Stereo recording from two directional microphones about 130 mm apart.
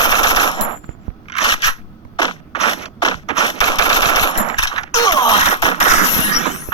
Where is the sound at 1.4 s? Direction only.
30° left (ahead or behind).